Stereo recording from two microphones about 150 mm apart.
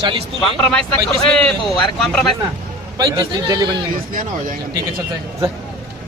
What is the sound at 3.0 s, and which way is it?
Speech, 25° right (ahead or behind).